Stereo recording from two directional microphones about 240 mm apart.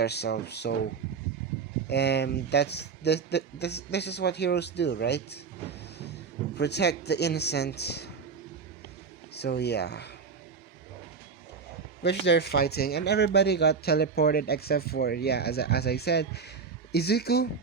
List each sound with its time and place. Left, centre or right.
0.0 s speech: left
1.9 s speech: left
6.6 s speech: left
9.3 s speech: left
12.0 s speech: left